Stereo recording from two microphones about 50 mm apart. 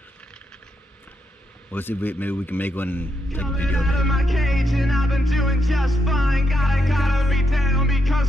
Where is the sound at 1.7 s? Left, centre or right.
Left.